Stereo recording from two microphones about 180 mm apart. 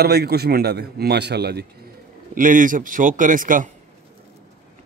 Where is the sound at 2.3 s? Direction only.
50° right (ahead or behind).